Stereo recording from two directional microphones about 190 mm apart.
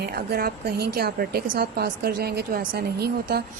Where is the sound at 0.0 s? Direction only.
55° right (ahead or behind).